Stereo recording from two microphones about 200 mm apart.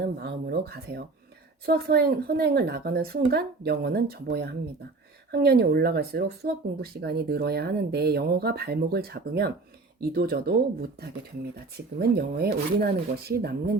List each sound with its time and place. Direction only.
0.0 s speech: 55° right (ahead or behind)
11.9 s speech: 50° right (ahead or behind)